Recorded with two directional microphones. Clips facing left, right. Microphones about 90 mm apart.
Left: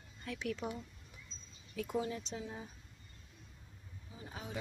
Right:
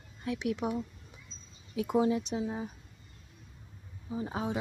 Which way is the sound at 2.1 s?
15° right (ahead or behind).